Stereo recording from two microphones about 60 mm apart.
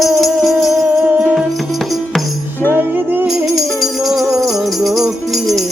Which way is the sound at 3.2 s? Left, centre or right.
Centre.